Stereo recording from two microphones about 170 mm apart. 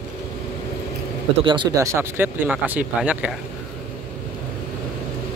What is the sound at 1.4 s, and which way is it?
Speech, 30° right (ahead or behind).